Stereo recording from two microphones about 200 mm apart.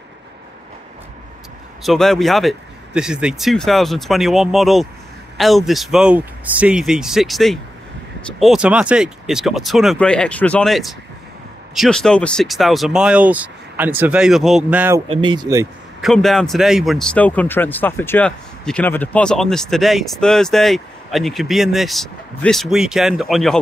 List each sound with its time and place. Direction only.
1.8 s speech: centre (ahead or behind)
15.0 s speech: 25° right (ahead or behind)
16.0 s speech: centre (ahead or behind)